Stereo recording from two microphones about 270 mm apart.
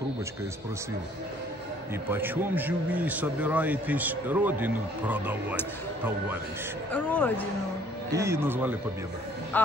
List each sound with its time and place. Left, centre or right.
2.0 s a man's voice: centre
6.9 s speech: centre
8.1 s a man's voice: centre